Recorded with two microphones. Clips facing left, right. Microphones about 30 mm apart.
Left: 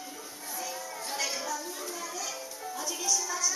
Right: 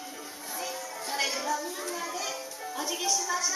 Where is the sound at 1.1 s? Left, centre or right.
Centre.